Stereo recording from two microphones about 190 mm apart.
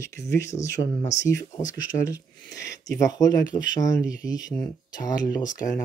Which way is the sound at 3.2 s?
20° left (ahead or behind).